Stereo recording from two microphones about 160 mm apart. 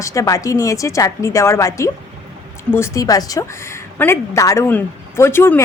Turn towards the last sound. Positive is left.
turn(degrees=15)  # may be behind; listen again after turning